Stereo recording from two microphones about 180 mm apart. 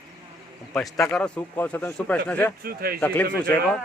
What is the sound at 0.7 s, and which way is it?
A man's voice, 5° left (ahead or behind).